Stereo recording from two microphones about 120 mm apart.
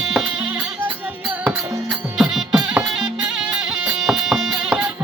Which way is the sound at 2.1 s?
5° right (ahead or behind).